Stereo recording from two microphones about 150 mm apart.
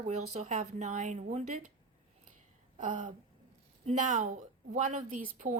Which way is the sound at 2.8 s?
60° right (ahead or behind).